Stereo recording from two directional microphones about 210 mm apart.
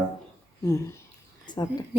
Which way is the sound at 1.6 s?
20° left (ahead or behind).